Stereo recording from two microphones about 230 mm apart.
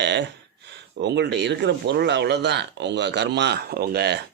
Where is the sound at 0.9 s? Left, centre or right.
Right.